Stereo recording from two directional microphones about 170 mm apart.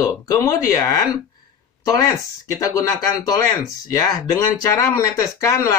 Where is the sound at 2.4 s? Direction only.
20° left (ahead or behind).